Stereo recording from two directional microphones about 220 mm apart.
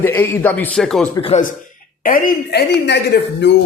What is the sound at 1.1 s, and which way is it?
Speech, 25° left (ahead or behind).